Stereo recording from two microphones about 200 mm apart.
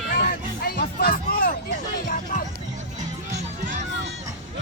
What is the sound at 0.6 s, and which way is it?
Music, 45° left (ahead or behind).